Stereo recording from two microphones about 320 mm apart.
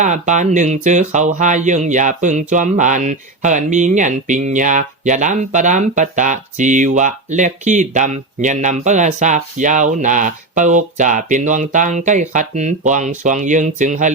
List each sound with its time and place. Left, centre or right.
0.0 s speech: right